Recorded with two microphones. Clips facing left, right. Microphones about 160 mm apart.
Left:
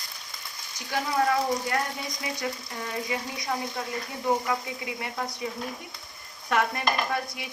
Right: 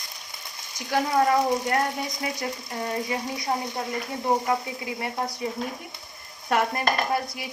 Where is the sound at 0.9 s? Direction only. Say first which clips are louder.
Right 4 dB; 45° right (ahead or behind).